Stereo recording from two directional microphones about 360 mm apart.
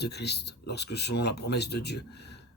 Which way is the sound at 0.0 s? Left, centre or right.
Left.